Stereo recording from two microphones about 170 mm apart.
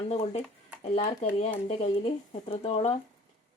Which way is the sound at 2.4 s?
35° left (ahead or behind).